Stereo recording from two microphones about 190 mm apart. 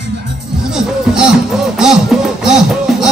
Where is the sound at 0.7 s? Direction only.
5° right (ahead or behind).